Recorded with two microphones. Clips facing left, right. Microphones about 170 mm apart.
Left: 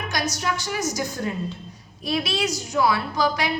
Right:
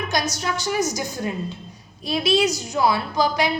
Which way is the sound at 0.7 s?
20° right (ahead or behind).